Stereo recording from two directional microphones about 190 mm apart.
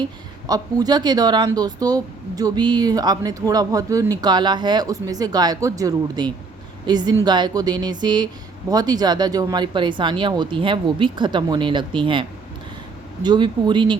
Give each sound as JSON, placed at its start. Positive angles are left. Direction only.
{"t": 0.4, "sound": "speech", "side_deg": -20}
{"t": 13.2, "sound": "speech", "side_deg": -25}